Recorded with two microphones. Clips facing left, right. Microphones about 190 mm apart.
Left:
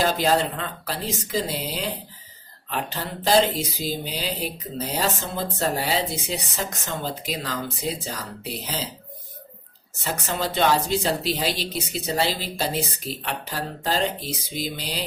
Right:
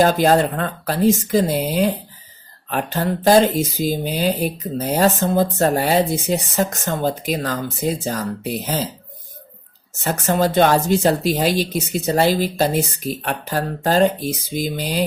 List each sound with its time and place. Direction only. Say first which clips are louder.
0.0 s speech: right 7 dB; 50° right (ahead or behind)
10.0 s speech: right 9 dB; 50° right (ahead or behind)